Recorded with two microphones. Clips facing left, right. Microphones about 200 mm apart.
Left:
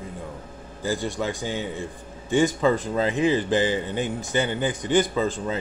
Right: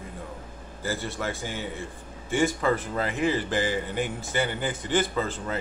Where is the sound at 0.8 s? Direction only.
15° left (ahead or behind).